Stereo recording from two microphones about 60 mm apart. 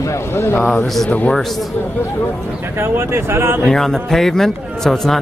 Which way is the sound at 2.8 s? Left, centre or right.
Right.